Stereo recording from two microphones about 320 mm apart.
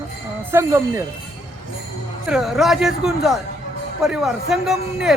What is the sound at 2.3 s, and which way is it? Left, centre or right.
A man's voice, centre.